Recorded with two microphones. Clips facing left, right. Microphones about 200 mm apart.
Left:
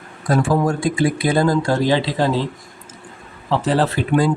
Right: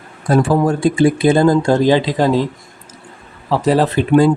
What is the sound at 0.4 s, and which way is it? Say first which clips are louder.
Speech: right 4 dB; 30° right (ahead or behind).